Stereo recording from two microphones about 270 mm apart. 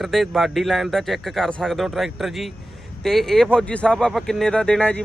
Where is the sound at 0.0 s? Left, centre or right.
Centre.